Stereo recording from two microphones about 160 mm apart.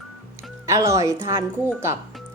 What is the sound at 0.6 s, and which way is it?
Speech, 20° right (ahead or behind).